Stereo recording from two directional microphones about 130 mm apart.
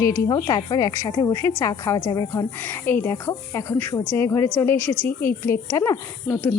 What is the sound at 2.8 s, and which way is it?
A woman's voice, 15° left (ahead or behind).